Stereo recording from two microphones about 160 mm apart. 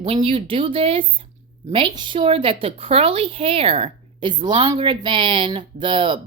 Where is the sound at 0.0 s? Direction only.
35° right (ahead or behind).